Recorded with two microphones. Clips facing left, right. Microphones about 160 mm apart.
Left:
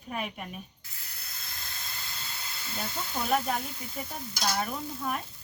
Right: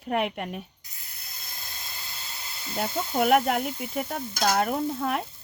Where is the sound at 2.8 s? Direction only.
75° right (ahead or behind); by 4.6 s 55° right (ahead or behind).